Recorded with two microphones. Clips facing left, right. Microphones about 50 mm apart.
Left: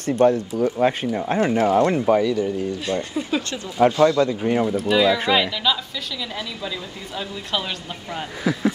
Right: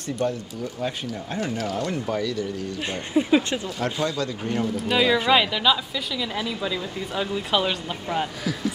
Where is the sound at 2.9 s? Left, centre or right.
Centre.